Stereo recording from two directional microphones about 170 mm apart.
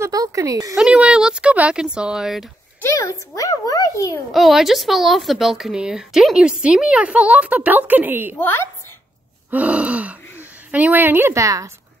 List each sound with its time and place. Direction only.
0.0 s speech: 20° right (ahead or behind)
0.7 s a woman's voice: 5° right (ahead or behind)
2.9 s a child's voice: 15° left (ahead or behind)
4.3 s a woman's voice: centre (ahead or behind)
8.4 s a woman's voice: 15° left (ahead or behind)
9.5 s gasp: 10° right (ahead or behind)
10.4 s a woman's voice: 10° right (ahead or behind)